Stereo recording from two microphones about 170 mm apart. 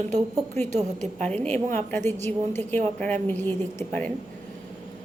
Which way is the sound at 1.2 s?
10° left (ahead or behind).